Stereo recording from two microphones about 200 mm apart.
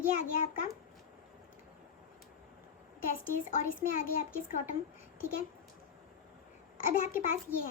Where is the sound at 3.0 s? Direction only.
45° left (ahead or behind).